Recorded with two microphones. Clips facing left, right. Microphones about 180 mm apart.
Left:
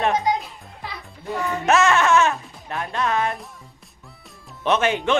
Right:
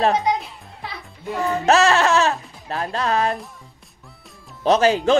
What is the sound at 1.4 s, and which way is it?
Music, 35° right (ahead or behind).